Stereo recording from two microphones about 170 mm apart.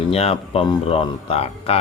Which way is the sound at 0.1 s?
35° left (ahead or behind).